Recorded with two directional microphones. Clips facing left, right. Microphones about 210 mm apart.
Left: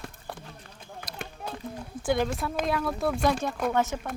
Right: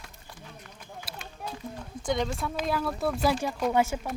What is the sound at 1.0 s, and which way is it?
Run, 55° left (ahead or behind).